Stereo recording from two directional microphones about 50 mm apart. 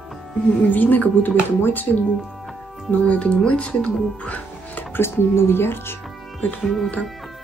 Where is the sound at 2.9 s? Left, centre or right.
Left.